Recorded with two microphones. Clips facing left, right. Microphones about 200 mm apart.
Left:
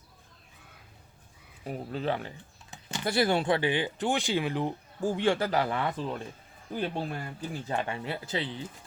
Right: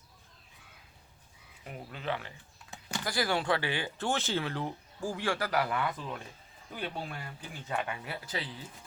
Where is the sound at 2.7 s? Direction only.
20° left (ahead or behind).